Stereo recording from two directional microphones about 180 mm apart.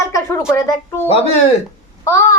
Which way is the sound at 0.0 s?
15° left (ahead or behind).